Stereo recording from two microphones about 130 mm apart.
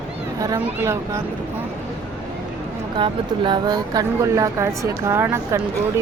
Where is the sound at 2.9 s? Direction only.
40° right (ahead or behind); by 6.0 s 20° right (ahead or behind).